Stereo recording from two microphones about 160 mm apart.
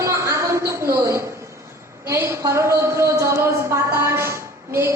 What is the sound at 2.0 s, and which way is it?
A woman's voice, 15° right (ahead or behind).